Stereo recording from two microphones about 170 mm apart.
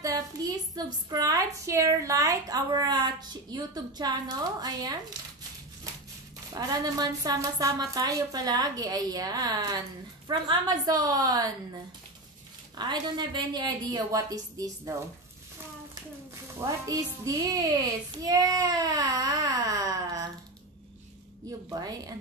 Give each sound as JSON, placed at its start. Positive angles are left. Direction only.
{"t": 0.0, "sound": "a woman's voice", "side_deg": -20}
{"t": 6.5, "sound": "speech", "side_deg": -20}
{"t": 12.7, "sound": "speech", "side_deg": -25}
{"t": 16.5, "sound": "speech", "side_deg": -20}
{"t": 21.6, "sound": "speech", "side_deg": -20}